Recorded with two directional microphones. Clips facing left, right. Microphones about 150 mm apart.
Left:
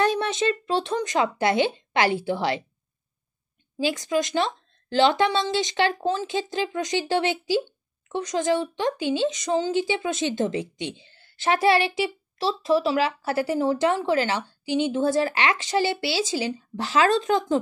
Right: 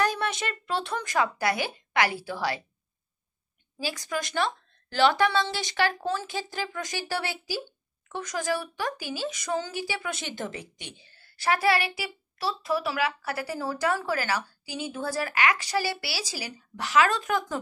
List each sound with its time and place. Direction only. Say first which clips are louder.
0.0 s speech: left 5 dB; 25° left (ahead or behind)
3.8 s speech: left 8 dB; 20° left (ahead or behind)